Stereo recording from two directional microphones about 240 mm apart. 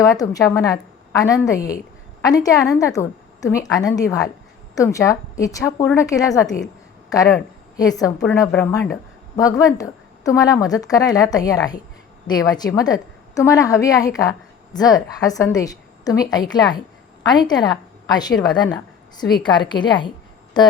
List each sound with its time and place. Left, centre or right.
0.0 s a woman's voice: centre